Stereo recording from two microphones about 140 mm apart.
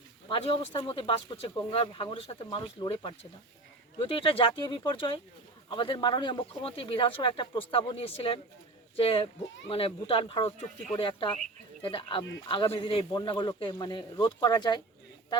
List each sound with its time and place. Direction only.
0.3 s speech: 40° left (ahead or behind)